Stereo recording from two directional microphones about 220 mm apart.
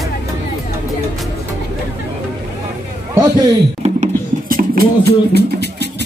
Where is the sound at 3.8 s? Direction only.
35° right (ahead or behind).